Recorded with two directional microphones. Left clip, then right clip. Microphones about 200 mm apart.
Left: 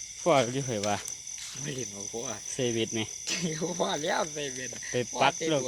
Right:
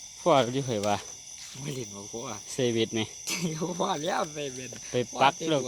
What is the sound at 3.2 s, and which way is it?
Speech, 50° right (ahead or behind).